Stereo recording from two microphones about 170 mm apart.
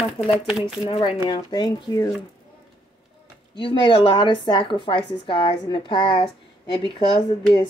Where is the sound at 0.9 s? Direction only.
35° left (ahead or behind).